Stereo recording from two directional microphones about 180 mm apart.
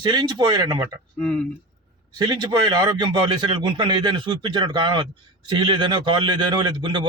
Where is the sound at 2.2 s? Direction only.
25° right (ahead or behind).